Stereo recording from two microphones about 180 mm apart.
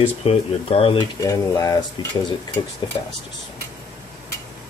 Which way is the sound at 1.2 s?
20° left (ahead or behind).